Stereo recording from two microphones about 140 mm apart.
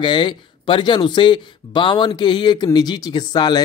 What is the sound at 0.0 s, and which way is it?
Speech, 35° left (ahead or behind).